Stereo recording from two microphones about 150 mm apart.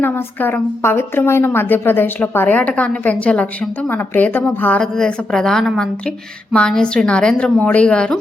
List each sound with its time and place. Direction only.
0.0 s a woman's voice: 15° left (ahead or behind)